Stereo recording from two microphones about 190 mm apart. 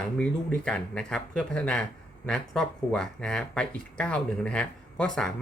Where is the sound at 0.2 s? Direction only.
5° left (ahead or behind).